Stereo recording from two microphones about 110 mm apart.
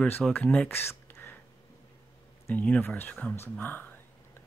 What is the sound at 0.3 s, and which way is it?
Speech, 15° left (ahead or behind).